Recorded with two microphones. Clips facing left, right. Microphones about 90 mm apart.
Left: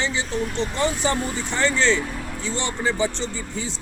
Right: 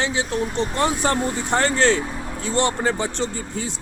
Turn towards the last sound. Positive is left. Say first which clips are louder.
# right 2 dB
turn(degrees=-55)  # may be behind; listen again after turning